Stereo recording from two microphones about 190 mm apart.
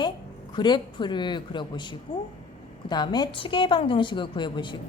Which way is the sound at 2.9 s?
20° left (ahead or behind).